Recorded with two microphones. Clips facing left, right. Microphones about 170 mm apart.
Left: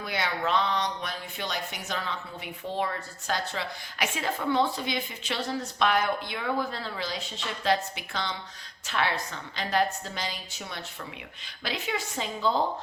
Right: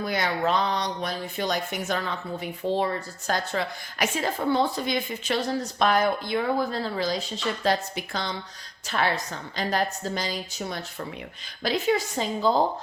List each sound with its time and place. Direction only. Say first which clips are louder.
0.0 s a woman's voice: right 5 dB; 40° right (ahead or behind)
2.6 s a woman's voice: right 5 dB; 30° right (ahead or behind)